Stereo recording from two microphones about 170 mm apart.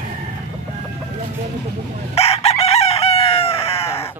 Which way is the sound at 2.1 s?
35° left (ahead or behind).